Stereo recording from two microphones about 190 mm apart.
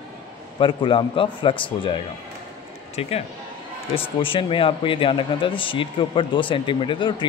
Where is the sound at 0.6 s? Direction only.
25° left (ahead or behind).